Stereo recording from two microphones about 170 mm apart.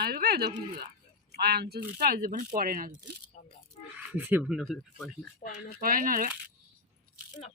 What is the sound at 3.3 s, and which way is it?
Speech, 45° left (ahead or behind).